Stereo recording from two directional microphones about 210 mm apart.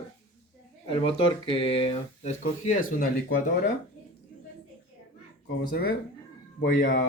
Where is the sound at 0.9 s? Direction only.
25° left (ahead or behind).